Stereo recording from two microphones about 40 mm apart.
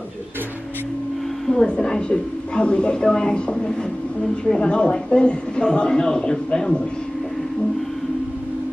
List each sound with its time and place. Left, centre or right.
1.5 s a woman's voice: centre